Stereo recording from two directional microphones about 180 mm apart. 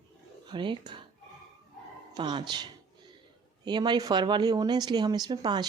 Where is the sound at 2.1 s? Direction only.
25° right (ahead or behind).